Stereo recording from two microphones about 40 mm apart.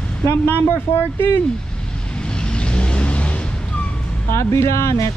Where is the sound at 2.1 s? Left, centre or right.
Left.